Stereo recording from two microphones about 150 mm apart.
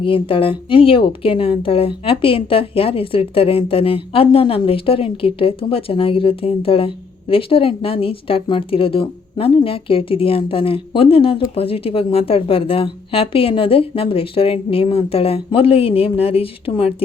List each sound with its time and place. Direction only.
0.0 s speech: 35° left (ahead or behind)